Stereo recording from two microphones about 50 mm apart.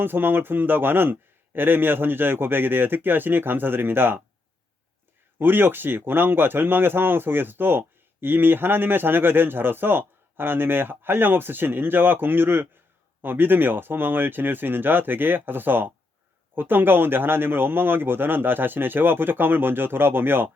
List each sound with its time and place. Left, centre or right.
0.0 s speech: right
5.4 s speech: right